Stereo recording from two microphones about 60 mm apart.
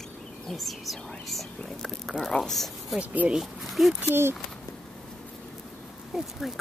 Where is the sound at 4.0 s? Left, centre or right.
Right.